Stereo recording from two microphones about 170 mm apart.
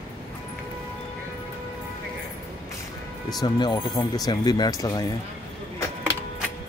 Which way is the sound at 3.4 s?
25° left (ahead or behind).